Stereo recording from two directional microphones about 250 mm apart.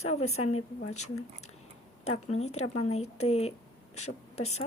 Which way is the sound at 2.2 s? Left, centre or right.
Left.